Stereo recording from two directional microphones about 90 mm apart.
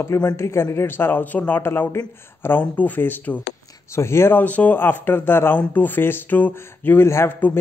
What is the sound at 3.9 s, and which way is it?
Speech, 30° left (ahead or behind).